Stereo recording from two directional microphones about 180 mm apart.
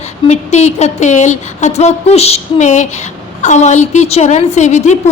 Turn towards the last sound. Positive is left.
turn(degrees=40)  # may be behind; listen again after turning